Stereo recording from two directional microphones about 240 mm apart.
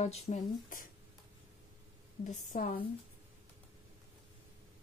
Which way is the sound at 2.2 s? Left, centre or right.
Left.